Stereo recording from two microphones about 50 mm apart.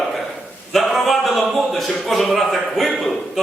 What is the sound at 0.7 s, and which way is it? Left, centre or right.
Speech, centre.